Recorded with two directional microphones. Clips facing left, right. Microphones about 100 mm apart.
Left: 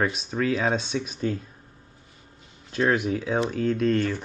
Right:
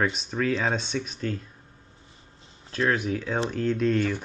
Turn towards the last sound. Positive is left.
turn(degrees=0)  # may be behind; listen again after turning